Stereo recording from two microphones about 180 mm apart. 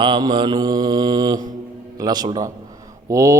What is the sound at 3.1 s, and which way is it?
Speech, 15° right (ahead or behind).